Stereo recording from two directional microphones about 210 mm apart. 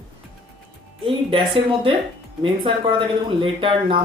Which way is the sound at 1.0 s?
25° right (ahead or behind).